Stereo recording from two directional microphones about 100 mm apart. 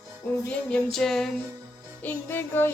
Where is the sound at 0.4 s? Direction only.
15° left (ahead or behind).